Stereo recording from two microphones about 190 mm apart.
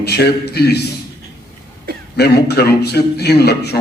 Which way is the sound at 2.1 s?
60° left (ahead or behind).